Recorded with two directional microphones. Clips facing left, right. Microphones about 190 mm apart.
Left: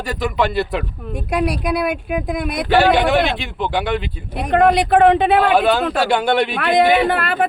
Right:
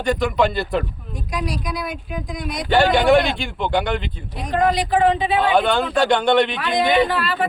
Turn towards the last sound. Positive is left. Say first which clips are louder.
# left 2 dB
turn(degrees=55)  # may be behind; listen again after turning